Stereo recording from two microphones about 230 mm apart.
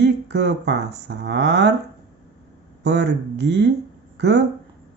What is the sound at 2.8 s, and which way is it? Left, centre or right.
Speech, right.